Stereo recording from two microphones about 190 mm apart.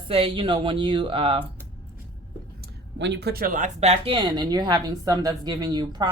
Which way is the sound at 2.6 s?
65° right (ahead or behind).